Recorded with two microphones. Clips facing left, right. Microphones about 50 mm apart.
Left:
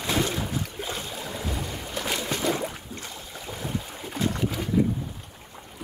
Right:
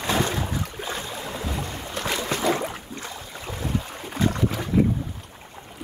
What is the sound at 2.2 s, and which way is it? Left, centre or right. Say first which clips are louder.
Boat: right 4 dB; right.